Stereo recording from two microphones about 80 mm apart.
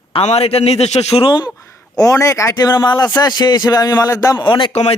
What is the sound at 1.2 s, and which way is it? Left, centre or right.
Speech, left.